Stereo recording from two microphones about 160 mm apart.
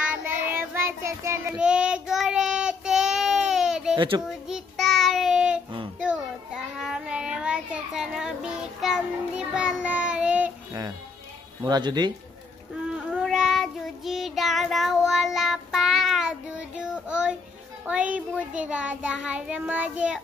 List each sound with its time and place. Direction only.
0.0 s child singing: 10° right (ahead or behind)
1.5 s child singing: 5° right (ahead or behind)
3.9 s speech: 30° right (ahead or behind)
4.3 s child singing: centre (ahead or behind)
11.6 s speech: 25° right (ahead or behind)
12.8 s child singing: 5° right (ahead or behind)